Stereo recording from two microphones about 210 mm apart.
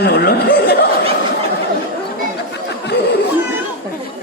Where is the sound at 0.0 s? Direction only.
50° left (ahead or behind).